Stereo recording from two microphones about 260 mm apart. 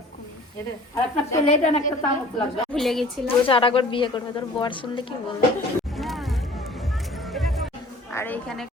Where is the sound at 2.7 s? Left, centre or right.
Centre.